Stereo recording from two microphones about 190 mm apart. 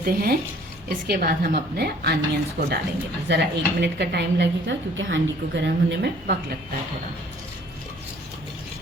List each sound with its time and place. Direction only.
0.0 s a woman's voice: 50° right (ahead or behind)